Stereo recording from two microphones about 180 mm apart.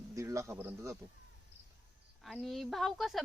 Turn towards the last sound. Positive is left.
turn(degrees=0)  # may be behind; listen again after turning